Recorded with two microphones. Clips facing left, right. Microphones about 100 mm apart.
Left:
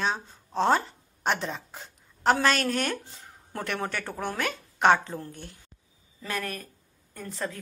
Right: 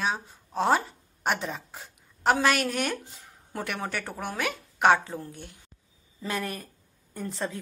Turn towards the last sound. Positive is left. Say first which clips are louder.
# right 2 dB
turn(degrees=-25)  # may be behind; listen again after turning